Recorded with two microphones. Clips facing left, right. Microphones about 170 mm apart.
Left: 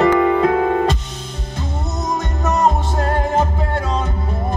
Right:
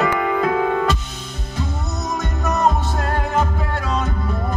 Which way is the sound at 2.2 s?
25° left (ahead or behind).